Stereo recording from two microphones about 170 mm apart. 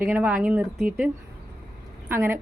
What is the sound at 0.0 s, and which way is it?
A woman's voice, 10° right (ahead or behind).